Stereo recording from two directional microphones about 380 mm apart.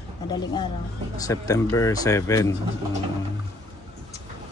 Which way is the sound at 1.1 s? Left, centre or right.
Centre.